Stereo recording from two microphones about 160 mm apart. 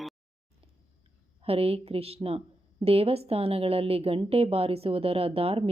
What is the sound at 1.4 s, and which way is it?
A woman's voice, 35° right (ahead or behind).